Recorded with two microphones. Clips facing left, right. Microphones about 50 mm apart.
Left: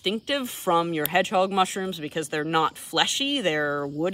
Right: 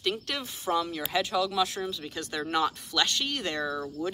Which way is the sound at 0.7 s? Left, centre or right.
Left.